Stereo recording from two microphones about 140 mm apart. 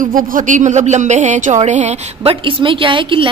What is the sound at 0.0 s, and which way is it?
Speech, 80° right.